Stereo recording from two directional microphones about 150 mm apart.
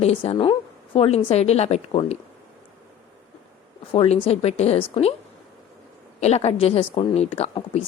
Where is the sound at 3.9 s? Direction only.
40° left (ahead or behind).